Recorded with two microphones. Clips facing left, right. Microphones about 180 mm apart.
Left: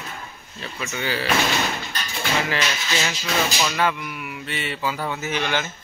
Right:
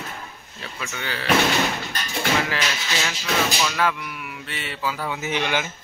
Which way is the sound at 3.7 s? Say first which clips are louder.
Left 1 dB; centre (ahead or behind).